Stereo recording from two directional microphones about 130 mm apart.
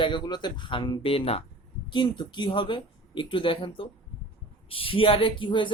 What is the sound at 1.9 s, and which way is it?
A man's voice, 35° left (ahead or behind).